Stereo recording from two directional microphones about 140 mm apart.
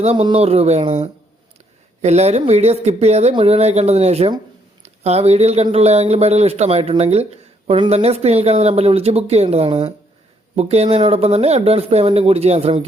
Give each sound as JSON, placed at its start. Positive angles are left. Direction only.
{"t": 0.0, "sound": "speech", "side_deg": -45}